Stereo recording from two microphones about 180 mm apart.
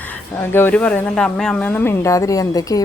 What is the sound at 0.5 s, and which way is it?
Speech, 10° left (ahead or behind).